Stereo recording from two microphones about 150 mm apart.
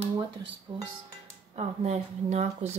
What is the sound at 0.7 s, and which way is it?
Speech, 35° right (ahead or behind).